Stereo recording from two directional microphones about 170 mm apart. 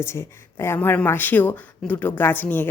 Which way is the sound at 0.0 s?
15° left (ahead or behind).